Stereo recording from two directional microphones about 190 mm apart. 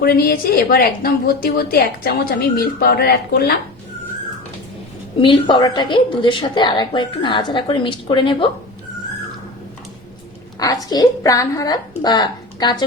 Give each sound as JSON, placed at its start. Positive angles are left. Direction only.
{"t": 0.0, "sound": "a woman's voice", "side_deg": 55}
{"t": 5.2, "sound": "a woman's voice", "side_deg": 25}
{"t": 10.8, "sound": "a woman's voice", "side_deg": 20}